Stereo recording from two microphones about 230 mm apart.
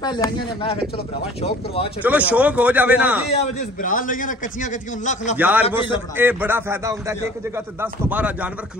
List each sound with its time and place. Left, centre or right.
0.0 s speech: centre
2.0 s a man's voice: centre
3.3 s a man's voice: left
5.4 s a man's voice: centre